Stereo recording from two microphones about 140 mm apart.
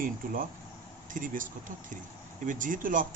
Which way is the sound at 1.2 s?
75° right (ahead or behind).